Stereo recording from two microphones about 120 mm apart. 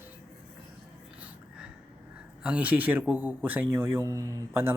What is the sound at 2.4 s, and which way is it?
Speech, 10° right (ahead or behind).